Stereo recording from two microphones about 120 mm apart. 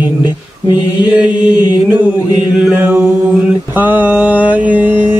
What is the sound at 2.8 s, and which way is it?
Mantra, 15° right (ahead or behind).